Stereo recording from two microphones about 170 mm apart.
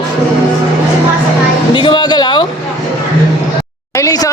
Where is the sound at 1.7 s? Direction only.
30° left (ahead or behind).